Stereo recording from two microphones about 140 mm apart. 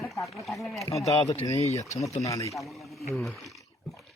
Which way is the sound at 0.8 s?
20° left (ahead or behind).